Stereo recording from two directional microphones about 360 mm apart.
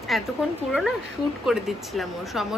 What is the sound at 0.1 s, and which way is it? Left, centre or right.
Speech, centre.